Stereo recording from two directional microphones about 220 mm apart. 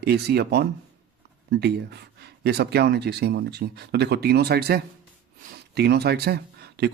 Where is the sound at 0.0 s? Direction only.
45° right (ahead or behind).